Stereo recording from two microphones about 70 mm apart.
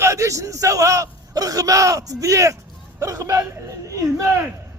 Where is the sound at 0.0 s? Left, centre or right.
Right.